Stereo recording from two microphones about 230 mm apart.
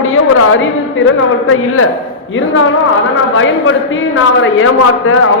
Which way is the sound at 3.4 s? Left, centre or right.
Left.